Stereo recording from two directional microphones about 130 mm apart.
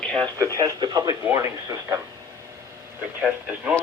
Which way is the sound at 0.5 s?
30° right (ahead or behind).